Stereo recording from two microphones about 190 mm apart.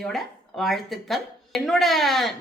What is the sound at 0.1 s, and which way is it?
A woman's voice, centre (ahead or behind).